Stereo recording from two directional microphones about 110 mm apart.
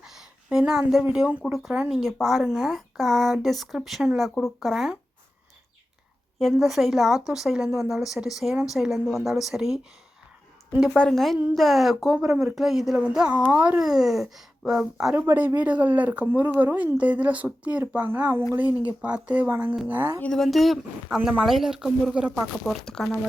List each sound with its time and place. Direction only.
0.0 s a sound: 5° right (ahead or behind)
1.0 s speech: 10° right (ahead or behind)
6.5 s speech: centre (ahead or behind)
10.9 s speech: 5° left (ahead or behind); by 13.7 s 15° right (ahead or behind)
13.8 s speech: 5° right (ahead or behind)
15.1 s speech: 15° right (ahead or behind)
20.2 s speech: 5° left (ahead or behind)